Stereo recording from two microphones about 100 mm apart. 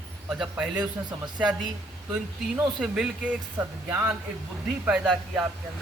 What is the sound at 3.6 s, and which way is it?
Speech, 25° right (ahead or behind).